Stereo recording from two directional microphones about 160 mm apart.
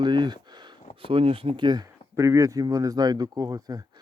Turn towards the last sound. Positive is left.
turn(degrees=-25)  # may be behind; listen again after turning